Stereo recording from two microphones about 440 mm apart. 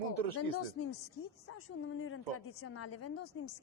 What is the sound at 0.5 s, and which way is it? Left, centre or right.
A woman's voice, left.